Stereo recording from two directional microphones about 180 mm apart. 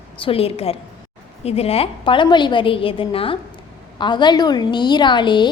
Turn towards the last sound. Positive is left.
turn(degrees=25)  # may be behind; listen again after turning